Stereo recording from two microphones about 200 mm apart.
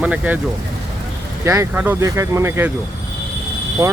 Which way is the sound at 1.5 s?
10° right (ahead or behind).